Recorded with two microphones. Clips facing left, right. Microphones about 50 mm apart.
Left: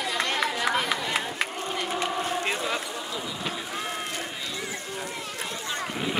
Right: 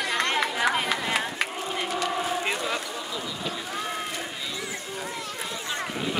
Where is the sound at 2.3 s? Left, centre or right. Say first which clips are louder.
Even; centre.